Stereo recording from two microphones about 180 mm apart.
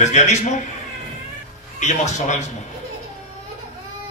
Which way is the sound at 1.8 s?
40° left (ahead or behind).